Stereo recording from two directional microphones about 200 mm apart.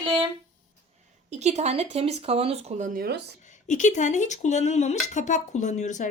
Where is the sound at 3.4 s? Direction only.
40° left (ahead or behind).